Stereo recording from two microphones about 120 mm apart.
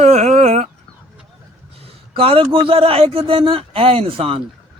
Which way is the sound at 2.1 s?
50° right (ahead or behind).